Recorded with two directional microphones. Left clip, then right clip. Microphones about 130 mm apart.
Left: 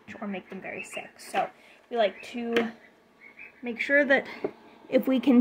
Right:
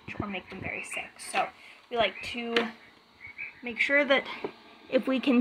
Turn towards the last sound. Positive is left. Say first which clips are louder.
# left 3 dB
turn(degrees=45)  # may be behind; listen again after turning